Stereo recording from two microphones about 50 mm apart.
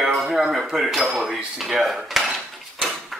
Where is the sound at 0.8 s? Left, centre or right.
Centre.